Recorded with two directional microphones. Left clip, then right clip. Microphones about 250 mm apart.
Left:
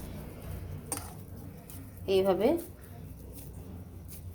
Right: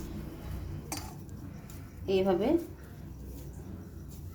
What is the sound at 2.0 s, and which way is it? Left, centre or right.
Speech, left.